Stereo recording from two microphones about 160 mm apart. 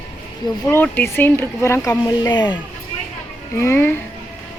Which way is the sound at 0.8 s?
10° left (ahead or behind).